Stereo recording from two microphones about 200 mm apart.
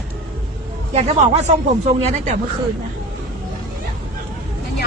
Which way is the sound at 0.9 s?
30° right (ahead or behind).